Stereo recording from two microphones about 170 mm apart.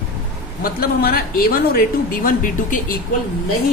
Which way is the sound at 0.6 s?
60° left (ahead or behind).